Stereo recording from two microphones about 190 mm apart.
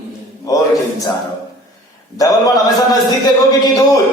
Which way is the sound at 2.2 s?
20° left (ahead or behind).